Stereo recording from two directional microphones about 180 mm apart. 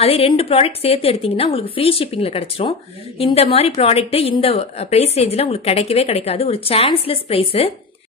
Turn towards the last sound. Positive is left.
turn(degrees=30)  # may be behind; listen again after turning